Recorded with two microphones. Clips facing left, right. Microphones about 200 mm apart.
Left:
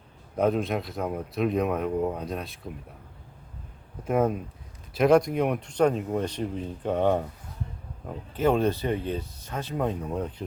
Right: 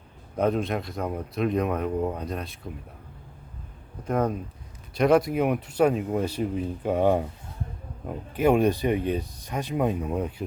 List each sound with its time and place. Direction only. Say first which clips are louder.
0.3 s speech: even; centre (ahead or behind)
4.0 s speech: left 1 dB; 5° left (ahead or behind); by 10.4 s 10° right (ahead or behind)